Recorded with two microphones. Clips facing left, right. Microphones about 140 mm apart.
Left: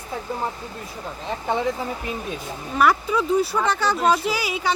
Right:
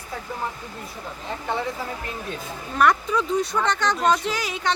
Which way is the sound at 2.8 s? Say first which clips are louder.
Left 1 dB; 5° left (ahead or behind).